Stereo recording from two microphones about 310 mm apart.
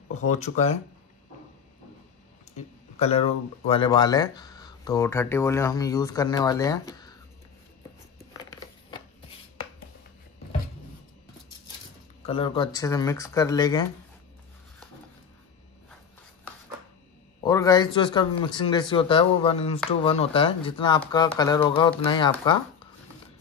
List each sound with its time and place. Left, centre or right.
0.1 s speech: left
2.5 s speech: left
8.3 s a sound: centre
12.3 s speech: centre
17.4 s speech: centre